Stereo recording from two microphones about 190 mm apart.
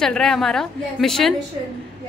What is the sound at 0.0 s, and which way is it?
A woman's voice, 5° left (ahead or behind).